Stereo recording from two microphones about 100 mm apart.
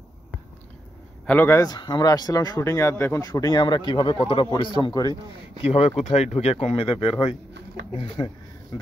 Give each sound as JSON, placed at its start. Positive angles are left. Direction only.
{"t": 1.2, "sound": "a man's voice", "side_deg": 20}
{"t": 1.6, "sound": "speech", "side_deg": 45}
{"t": 3.2, "sound": "speech", "side_deg": 35}
{"t": 3.6, "sound": "speech", "side_deg": 50}
{"t": 4.2, "sound": "a man's voice", "side_deg": 70}
{"t": 4.5, "sound": "speech", "side_deg": 55}
{"t": 5.7, "sound": "speech", "side_deg": 90}